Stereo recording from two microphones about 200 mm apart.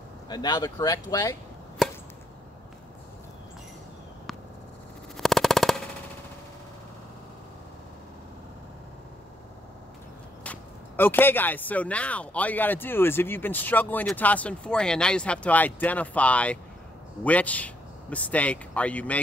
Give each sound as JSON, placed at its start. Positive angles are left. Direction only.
{"t": 0.3, "sound": "speech", "side_deg": 20}
{"t": 5.1, "sound": "a sound", "side_deg": 0}
{"t": 10.4, "sound": "speech", "side_deg": 10}